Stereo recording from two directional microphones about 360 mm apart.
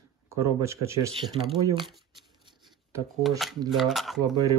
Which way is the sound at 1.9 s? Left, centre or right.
Centre.